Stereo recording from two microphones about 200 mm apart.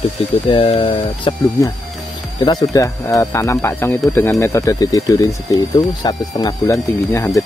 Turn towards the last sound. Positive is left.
turn(degrees=15)  # may be behind; listen again after turning